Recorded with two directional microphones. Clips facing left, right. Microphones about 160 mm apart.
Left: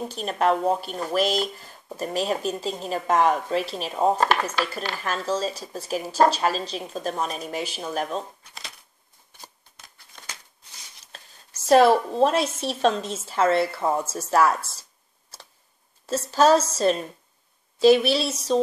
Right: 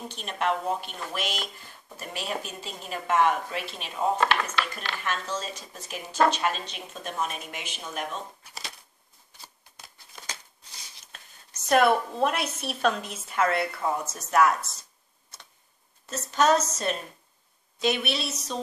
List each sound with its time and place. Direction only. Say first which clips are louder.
0.1 s a woman's voice: left 5 dB; 40° left (ahead or behind)
11.6 s a woman's voice: left 5 dB; 30° left (ahead or behind)
16.1 s a woman's voice: left 5 dB; 30° left (ahead or behind)